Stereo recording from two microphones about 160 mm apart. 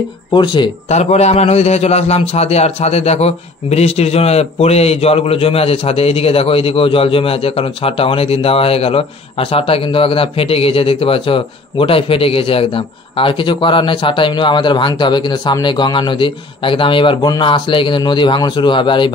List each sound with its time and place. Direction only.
0.3 s speech: 30° left (ahead or behind)
0.8 s a man's voice: 45° left (ahead or behind)